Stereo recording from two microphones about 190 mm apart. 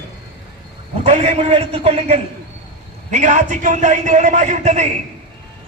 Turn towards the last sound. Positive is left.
turn(degrees=-40)  # may be behind; listen again after turning